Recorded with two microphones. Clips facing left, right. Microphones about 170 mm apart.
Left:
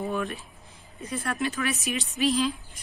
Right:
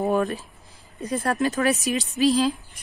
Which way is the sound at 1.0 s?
40° right (ahead or behind).